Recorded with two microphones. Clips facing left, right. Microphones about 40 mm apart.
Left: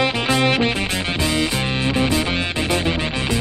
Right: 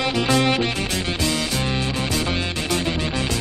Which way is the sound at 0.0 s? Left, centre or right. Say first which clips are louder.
Left 1 dB; centre.